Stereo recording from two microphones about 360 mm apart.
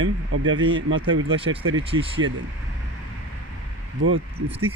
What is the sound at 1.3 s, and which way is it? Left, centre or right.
Speech, centre.